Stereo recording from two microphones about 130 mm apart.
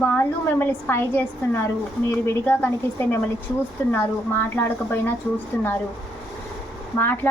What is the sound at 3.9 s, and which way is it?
Speech, 15° left (ahead or behind).